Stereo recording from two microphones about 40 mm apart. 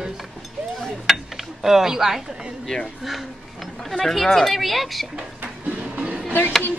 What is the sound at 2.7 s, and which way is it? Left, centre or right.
Speech, centre.